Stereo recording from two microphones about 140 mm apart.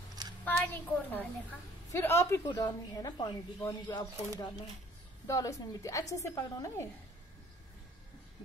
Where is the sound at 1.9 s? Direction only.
15° left (ahead or behind).